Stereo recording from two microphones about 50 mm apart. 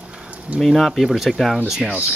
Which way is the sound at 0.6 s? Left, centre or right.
Centre.